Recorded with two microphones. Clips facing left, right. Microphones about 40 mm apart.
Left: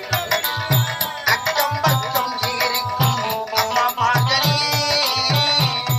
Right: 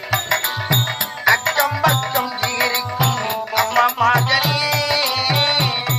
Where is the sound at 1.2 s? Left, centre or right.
Right.